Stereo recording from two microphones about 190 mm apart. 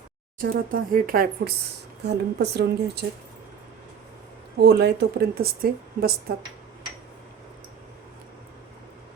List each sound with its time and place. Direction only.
0.3 s a woman's voice: 50° right (ahead or behind)
4.5 s a woman's voice: 60° right (ahead or behind)